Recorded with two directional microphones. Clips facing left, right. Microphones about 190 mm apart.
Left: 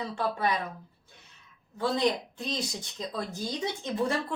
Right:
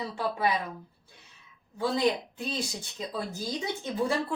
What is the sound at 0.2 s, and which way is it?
Speech, 10° right (ahead or behind).